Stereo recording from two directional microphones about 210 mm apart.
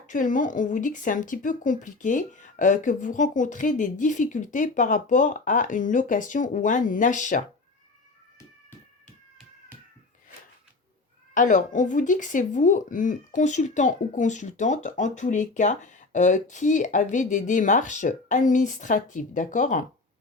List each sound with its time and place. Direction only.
0.1 s speech: 40° left (ahead or behind)
11.3 s speech: 35° left (ahead or behind)